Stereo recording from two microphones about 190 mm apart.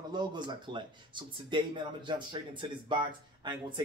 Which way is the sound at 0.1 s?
25° right (ahead or behind).